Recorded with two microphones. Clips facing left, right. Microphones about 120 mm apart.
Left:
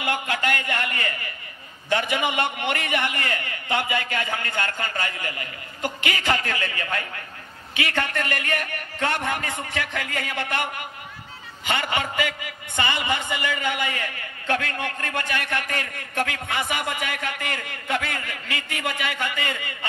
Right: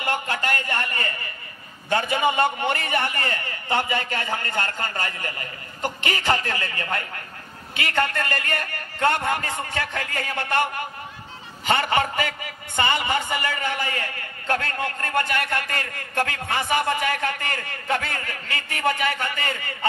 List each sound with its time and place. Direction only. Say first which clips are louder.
0.0 s a man's voice: even; 35° right (ahead or behind)